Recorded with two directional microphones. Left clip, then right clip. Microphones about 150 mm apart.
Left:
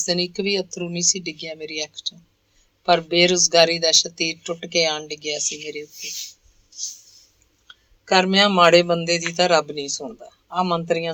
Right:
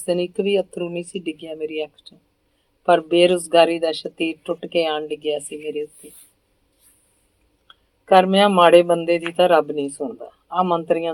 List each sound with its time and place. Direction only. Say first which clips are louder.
0.0 s speech: right 2 dB; 40° left (ahead or behind)
7.7 s speech: right 4 dB; 40° left (ahead or behind)